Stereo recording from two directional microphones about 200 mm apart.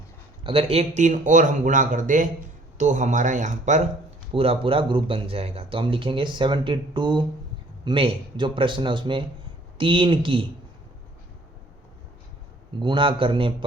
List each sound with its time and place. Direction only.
0.4 s speech: 30° right (ahead or behind)
12.8 s speech: 25° right (ahead or behind)